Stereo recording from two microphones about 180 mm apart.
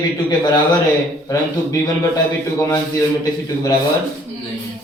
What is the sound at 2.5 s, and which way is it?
Speech, 15° left (ahead or behind).